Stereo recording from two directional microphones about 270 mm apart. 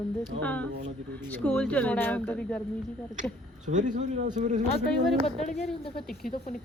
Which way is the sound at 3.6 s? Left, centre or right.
Right.